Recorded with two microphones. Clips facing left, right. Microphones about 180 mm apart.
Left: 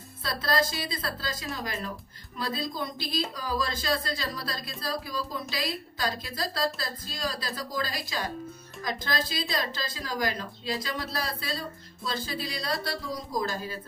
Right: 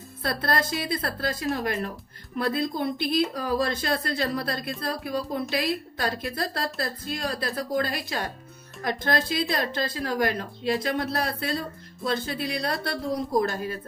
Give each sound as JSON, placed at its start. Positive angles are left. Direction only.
{"t": 0.2, "sound": "speech", "side_deg": -55}